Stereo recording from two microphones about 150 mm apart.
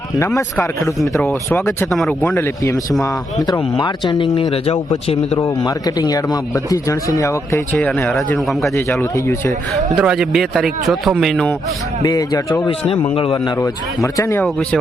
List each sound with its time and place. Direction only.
0.3 s speech: 20° left (ahead or behind)
1.9 s speech: 5° left (ahead or behind)
3.4 s speech: 30° left (ahead or behind)
5.4 s speech: 25° left (ahead or behind)
7.8 s speech: 10° left (ahead or behind)
10.0 s speech: 5° right (ahead or behind)
12.0 s speech: 25° left (ahead or behind)
12.8 s speech: 40° left (ahead or behind)
13.6 s speech: 20° left (ahead or behind)